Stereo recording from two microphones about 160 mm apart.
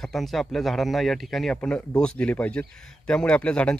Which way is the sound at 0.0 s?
Centre (ahead or behind).